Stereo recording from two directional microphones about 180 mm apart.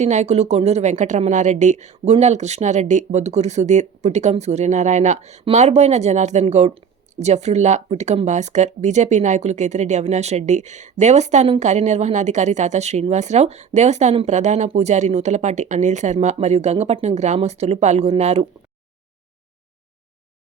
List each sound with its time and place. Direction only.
0.0 s a woman's voice: 40° right (ahead or behind)